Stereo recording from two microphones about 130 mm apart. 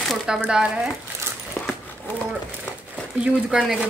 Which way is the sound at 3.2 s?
5° right (ahead or behind).